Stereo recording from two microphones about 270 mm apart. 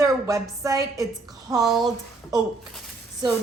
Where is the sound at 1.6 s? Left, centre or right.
Centre.